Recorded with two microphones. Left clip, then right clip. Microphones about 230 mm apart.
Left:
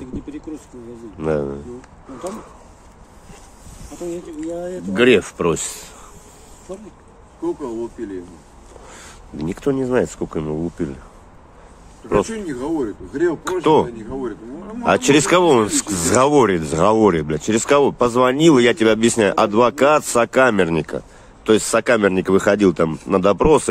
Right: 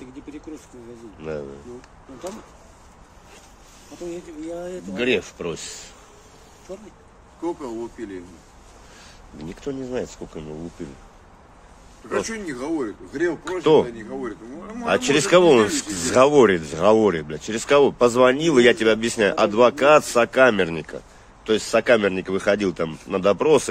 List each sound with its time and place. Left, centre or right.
4.1 s speech: centre
4.9 s speech: left
7.4 s speech: centre
9.0 s speech: left
12.3 s speech: centre
13.4 s speech: left
14.9 s speech: left